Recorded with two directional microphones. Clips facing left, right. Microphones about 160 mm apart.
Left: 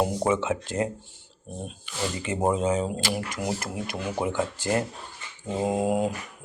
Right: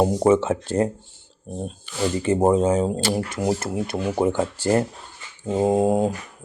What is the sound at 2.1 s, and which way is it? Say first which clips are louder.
Speech: right 7 dB; 35° right (ahead or behind).